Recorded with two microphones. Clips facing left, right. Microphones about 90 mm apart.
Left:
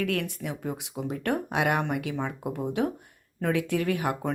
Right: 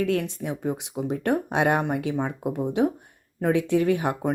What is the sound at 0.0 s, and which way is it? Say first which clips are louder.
A woman's voice: right 4 dB; 25° right (ahead or behind).